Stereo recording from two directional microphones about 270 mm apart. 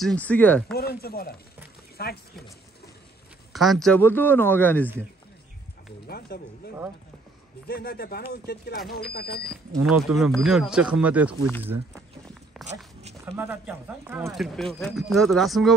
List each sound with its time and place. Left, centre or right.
0.0 s speech: centre
0.7 s speech: left
3.5 s a man's voice: centre
6.0 s speech: left
10.0 s speech: centre
12.6 s dog: centre
13.2 s speech: centre